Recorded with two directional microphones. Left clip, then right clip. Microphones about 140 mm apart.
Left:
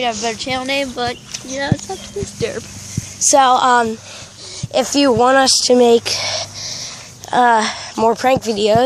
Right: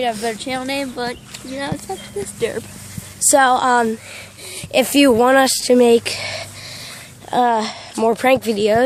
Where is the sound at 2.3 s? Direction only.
40° right (ahead or behind).